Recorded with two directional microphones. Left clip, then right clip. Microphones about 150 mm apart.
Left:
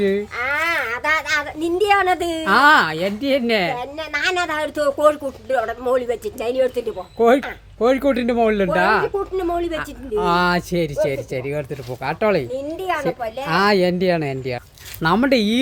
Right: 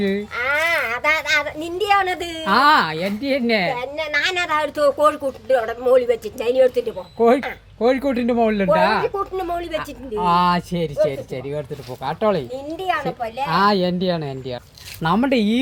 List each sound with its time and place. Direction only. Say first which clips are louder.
0.3 s a sound: right 1 dB; 10° left (ahead or behind)
2.5 s a child's voice: left 1 dB; 25° left (ahead or behind)
3.8 s speech: right 2 dB; 10° left (ahead or behind)
7.2 s speech: left 1 dB; 30° left (ahead or behind)
9.1 s speech: left 2 dB; 5° left (ahead or behind)
10.2 s speech: right 1 dB; 35° left (ahead or behind)
12.7 s a child's voice: right 1 dB; 20° left (ahead or behind)
13.5 s speech: left 1 dB; 50° left (ahead or behind)
15.0 s speech: left 2 dB; 40° left (ahead or behind)